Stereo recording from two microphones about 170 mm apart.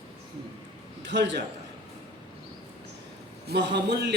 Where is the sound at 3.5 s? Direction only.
85° right.